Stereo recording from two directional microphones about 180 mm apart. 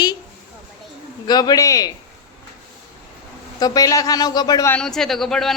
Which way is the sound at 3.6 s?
20° left (ahead or behind).